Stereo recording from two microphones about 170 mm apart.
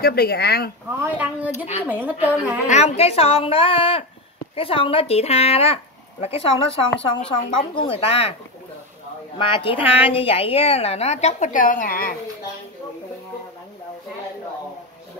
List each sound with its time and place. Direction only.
0.0 s speech: 65° left (ahead or behind)
1.0 s a woman's voice: 10° right (ahead or behind)
2.7 s a woman's voice: 40° left (ahead or behind)
9.4 s a woman's voice: 30° left (ahead or behind); by 12.2 s 55° left (ahead or behind)